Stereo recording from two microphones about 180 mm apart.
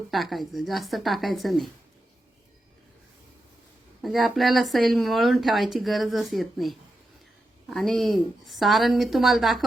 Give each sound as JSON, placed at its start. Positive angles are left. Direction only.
{"t": 0.1, "sound": "speech", "side_deg": 0}
{"t": 4.0, "sound": "speech", "side_deg": 0}